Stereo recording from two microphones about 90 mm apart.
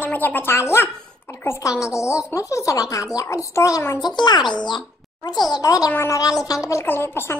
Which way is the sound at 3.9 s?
50° left (ahead or behind).